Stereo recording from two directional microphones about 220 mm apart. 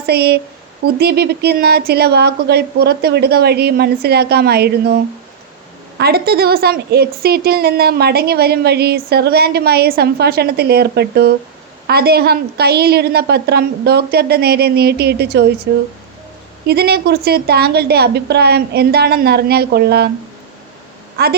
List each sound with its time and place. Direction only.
0.0 s a woman's voice: 45° right (ahead or behind)
6.0 s a woman's voice: 45° right (ahead or behind)
16.6 s a woman's voice: 45° right (ahead or behind)
21.2 s a woman's voice: 45° right (ahead or behind)